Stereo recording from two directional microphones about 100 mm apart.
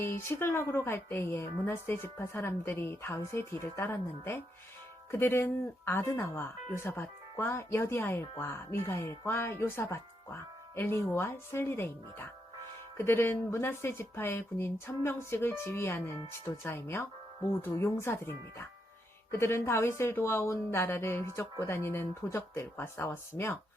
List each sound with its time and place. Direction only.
0.0 s a woman's voice: 25° left (ahead or behind)